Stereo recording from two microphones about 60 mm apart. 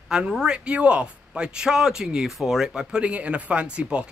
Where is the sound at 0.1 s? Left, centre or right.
Centre.